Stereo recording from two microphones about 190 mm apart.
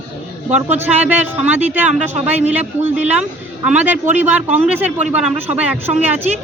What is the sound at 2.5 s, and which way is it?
Speech, 10° right (ahead or behind).